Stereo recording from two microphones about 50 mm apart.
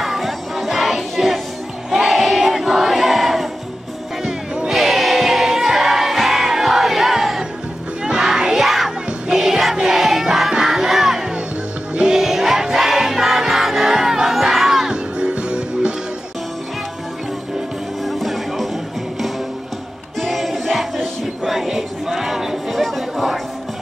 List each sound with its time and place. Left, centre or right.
0.0 s music: centre
1.9 s crowd: centre
4.2 s music: centre
15.1 s music: right
18.0 s music: centre
20.2 s music: centre